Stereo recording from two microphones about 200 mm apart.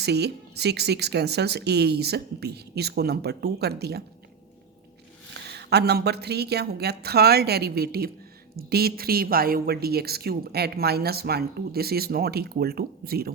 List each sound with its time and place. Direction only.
0.0 s speech: 55° right (ahead or behind)
5.3 s a woman's voice: 55° right (ahead or behind)